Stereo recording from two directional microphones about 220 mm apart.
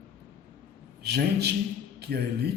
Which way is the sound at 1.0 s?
50° right (ahead or behind).